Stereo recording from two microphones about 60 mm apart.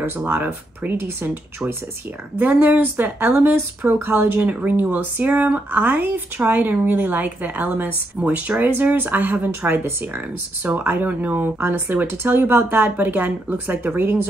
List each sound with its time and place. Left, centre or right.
0.3 s speech: right
8.2 s speech: centre
8.6 s speech: right